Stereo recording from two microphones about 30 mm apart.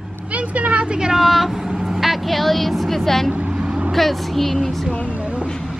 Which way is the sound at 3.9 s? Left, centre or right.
Centre.